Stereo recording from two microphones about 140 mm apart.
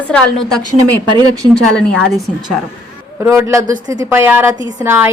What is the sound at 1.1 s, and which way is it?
Speech, 30° right (ahead or behind).